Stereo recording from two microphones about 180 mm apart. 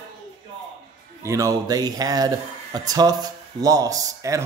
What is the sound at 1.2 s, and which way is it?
Speech, 15° right (ahead or behind).